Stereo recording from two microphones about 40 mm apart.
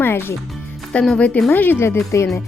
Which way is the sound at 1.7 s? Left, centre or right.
Left.